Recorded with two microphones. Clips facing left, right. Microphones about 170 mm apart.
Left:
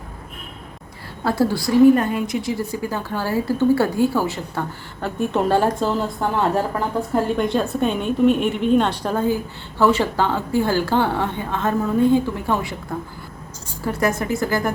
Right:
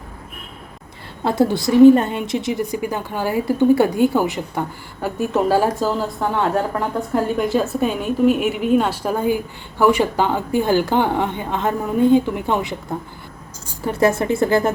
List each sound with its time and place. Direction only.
1.2 s a woman's voice: 20° right (ahead or behind)
5.0 s a woman's voice: 5° right (ahead or behind)
13.8 s a woman's voice: 25° right (ahead or behind)